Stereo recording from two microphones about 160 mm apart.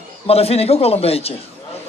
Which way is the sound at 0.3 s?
40° left (ahead or behind).